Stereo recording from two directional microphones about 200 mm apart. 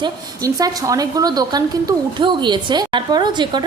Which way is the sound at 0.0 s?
20° right (ahead or behind).